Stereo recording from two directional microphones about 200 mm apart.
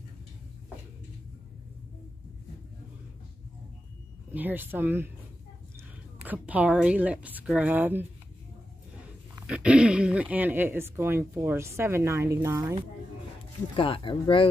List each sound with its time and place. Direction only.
4.3 s speech: 10° right (ahead or behind)
6.2 s speech: 10° right (ahead or behind)
9.5 s speech: 5° right (ahead or behind)
13.7 s speech: 25° left (ahead or behind)